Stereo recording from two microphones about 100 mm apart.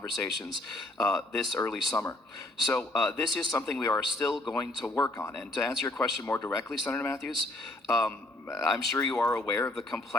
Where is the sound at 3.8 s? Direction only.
35° left (ahead or behind).